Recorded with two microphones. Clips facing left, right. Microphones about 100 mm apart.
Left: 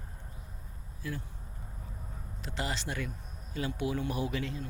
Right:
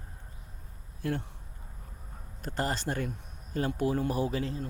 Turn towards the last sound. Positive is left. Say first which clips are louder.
# right 3 dB
turn(degrees=-35)  # may be behind; listen again after turning